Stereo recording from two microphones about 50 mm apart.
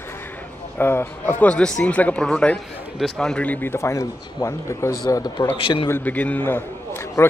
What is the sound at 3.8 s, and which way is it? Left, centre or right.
Speech, left.